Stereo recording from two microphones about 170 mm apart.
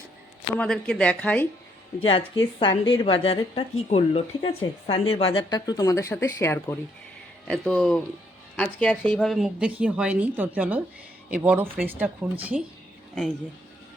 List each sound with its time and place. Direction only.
0.6 s speech: 5° left (ahead or behind)
2.0 s a woman's voice: 30° left (ahead or behind); by 6.7 s 15° left (ahead or behind)
7.4 s speech: 5° left (ahead or behind)